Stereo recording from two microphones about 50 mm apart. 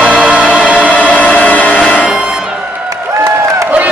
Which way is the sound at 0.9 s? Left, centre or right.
Left.